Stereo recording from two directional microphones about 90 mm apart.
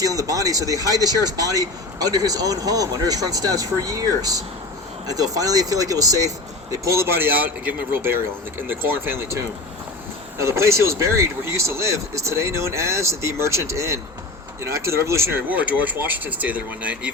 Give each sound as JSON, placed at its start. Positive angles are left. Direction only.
{"t": 0.0, "sound": "speech", "side_deg": -40}
{"t": 15.4, "sound": "speech", "side_deg": -20}